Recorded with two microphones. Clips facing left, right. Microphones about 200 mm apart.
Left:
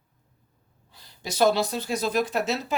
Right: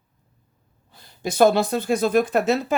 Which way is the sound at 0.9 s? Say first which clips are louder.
Right 6 dB; 55° right (ahead or behind).